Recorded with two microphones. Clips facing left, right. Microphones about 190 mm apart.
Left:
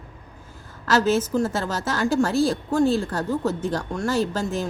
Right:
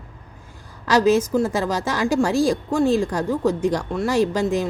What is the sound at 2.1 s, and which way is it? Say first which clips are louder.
A woman's voice: right 2 dB; 10° right (ahead or behind).